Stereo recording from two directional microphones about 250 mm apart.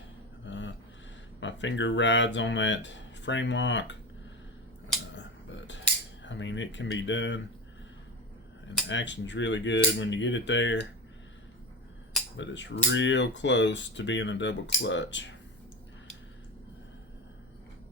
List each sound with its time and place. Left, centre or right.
0.4 s a sound: left
1.4 s speech: left
5.1 s finger snapping: left
6.2 s speech: left
8.9 s speech: left
12.4 s speech: left